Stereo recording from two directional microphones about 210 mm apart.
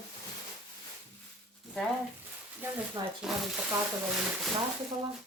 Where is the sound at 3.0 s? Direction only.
20° right (ahead or behind).